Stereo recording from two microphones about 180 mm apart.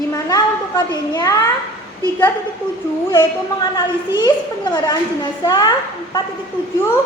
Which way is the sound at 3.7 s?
20° left (ahead or behind).